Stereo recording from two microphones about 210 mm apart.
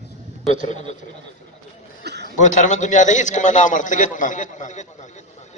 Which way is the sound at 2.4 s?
35° left (ahead or behind).